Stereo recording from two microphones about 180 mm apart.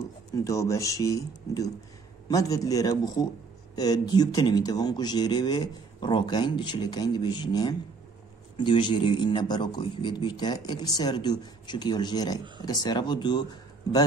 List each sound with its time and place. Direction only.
0.4 s a man's voice: 15° left (ahead or behind)